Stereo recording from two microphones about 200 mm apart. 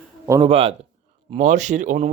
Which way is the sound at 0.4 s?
30° right (ahead or behind).